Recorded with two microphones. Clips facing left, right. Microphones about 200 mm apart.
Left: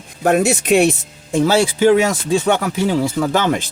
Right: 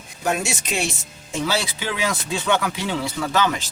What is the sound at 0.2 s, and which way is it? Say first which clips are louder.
Speech: left 9 dB; 55° left (ahead or behind).